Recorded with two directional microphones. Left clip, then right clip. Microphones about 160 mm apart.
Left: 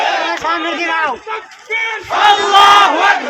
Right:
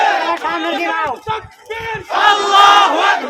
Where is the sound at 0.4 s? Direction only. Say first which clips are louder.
Left 1 dB; 35° left (ahead or behind).